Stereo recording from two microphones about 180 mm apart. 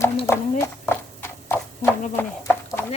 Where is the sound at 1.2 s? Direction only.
10° left (ahead or behind).